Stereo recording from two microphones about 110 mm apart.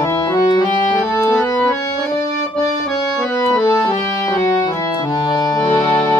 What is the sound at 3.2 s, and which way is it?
Accordion, 30° left (ahead or behind).